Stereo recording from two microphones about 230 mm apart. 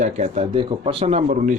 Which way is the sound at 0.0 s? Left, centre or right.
Right.